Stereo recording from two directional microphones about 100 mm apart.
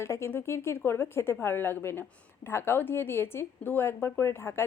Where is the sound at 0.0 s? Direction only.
25° left (ahead or behind).